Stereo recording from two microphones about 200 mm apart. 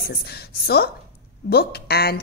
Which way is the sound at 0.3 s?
55° left (ahead or behind).